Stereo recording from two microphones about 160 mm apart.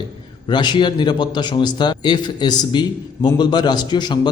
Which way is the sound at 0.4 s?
30° left (ahead or behind).